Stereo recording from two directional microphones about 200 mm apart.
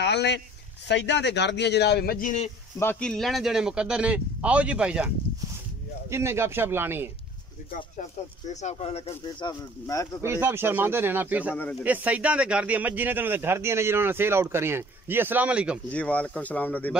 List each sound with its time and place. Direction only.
0.0 s speech: 60° left (ahead or behind); by 2.5 s 40° left (ahead or behind)
2.8 s speech: 5° left (ahead or behind); by 7.1 s 10° right (ahead or behind)
7.7 s speech: 35° left (ahead or behind); by 10.0 s 20° left (ahead or behind)
10.2 s speech: 10° right (ahead or behind)
15.9 s speech: 5° left (ahead or behind)